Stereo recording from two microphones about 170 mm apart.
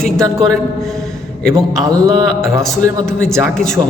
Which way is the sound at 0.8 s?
Centre (ahead or behind).